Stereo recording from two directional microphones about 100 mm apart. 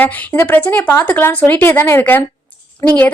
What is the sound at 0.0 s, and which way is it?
A woman's voice, 20° left (ahead or behind).